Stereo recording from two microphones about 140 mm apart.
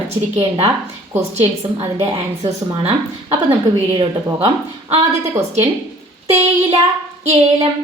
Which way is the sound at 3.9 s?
35° right (ahead or behind).